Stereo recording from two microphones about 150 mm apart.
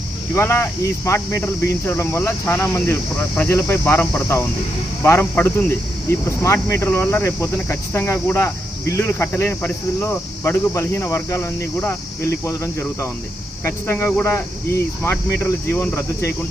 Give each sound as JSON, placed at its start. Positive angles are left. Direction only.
{"t": 0.3, "sound": "speech", "side_deg": 15}
{"t": 5.0, "sound": "speech", "side_deg": 15}
{"t": 13.7, "sound": "speech", "side_deg": 15}